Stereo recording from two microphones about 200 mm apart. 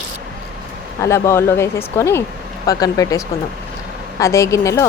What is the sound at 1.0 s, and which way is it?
Speech, 15° left (ahead or behind).